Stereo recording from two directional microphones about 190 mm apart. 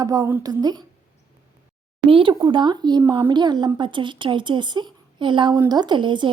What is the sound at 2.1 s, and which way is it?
A woman's voice, 30° right (ahead or behind).